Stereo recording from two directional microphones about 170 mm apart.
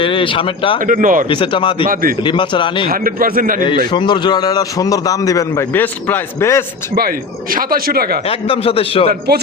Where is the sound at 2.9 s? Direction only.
55° right (ahead or behind).